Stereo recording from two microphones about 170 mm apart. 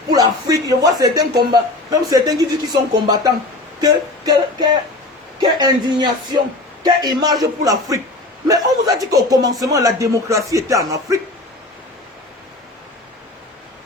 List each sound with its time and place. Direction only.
0.1 s speech: 20° right (ahead or behind)